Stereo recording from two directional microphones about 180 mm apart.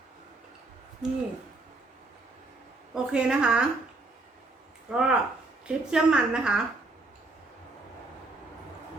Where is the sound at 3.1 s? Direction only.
5° right (ahead or behind).